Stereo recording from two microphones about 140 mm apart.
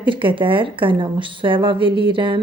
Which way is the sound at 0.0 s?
35° right (ahead or behind).